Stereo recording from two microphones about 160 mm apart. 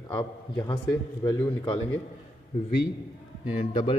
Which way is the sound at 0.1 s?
30° left (ahead or behind).